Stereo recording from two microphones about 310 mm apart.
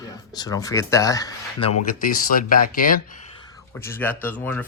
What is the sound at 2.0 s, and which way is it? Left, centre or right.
Speech, left.